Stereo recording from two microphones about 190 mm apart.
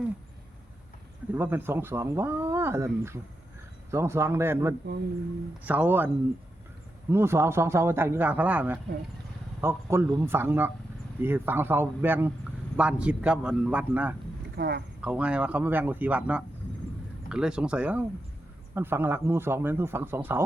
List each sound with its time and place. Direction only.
1.3 s speech: 10° right (ahead or behind)
7.1 s speech: 15° right (ahead or behind)
14.5 s speech: 60° right (ahead or behind)
15.0 s speech: 5° right (ahead or behind)